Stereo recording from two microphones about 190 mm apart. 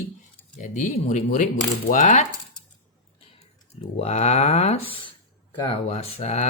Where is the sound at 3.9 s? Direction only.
35° left (ahead or behind).